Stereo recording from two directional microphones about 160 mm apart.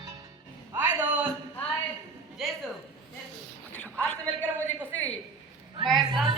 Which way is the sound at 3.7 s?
10° left (ahead or behind).